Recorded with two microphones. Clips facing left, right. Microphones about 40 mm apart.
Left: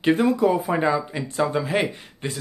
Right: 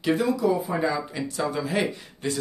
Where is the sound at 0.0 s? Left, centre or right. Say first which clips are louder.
Left 4 dB; left.